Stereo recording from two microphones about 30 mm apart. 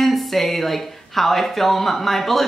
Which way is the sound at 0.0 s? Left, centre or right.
Centre.